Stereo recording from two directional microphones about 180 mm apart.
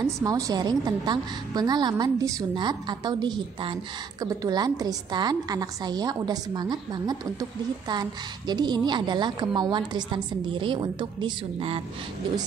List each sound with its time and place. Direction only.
0.0 s a woman's voice: 20° right (ahead or behind)